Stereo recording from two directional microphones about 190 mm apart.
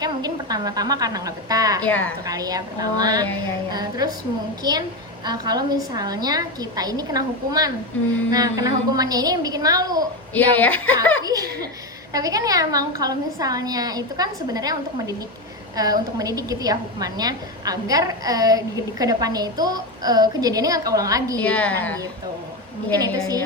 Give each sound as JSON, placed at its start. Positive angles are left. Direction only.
{"t": 0.0, "sound": "a woman's voice", "side_deg": -20}
{"t": 1.8, "sound": "speech", "side_deg": 10}
{"t": 2.2, "sound": "a woman's voice", "side_deg": -20}
{"t": 10.3, "sound": "speech", "side_deg": 10}
{"t": 11.2, "sound": "a woman's voice", "side_deg": -20}
{"t": 21.4, "sound": "speech", "side_deg": 5}